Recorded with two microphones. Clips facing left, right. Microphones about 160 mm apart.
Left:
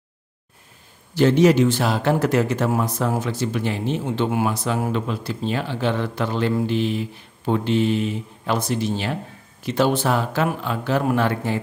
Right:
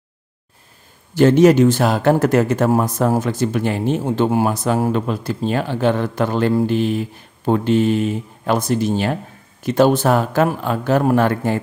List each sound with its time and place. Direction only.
1.1 s a man's voice: 50° right (ahead or behind)